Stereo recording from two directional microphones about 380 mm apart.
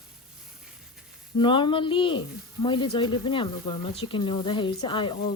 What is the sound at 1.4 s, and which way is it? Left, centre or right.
Speech, centre.